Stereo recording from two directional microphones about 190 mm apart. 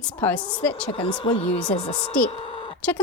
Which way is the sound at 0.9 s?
30° left (ahead or behind).